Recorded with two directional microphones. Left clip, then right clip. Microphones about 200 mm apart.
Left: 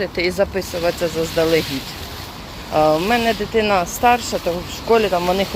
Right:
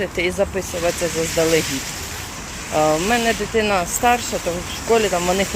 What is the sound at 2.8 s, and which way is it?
Speech, 10° left (ahead or behind).